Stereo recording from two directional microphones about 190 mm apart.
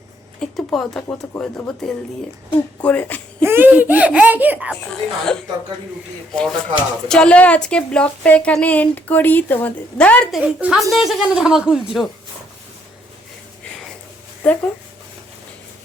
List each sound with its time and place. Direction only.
0.3 s speech: centre (ahead or behind)
3.4 s speech: 10° right (ahead or behind)
4.9 s speech: 5° left (ahead or behind)
10.4 s speech: 5° right (ahead or behind)